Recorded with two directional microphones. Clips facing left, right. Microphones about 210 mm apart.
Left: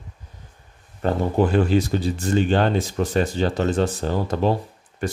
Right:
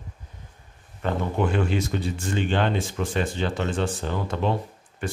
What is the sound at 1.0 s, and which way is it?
Speech, 35° left (ahead or behind).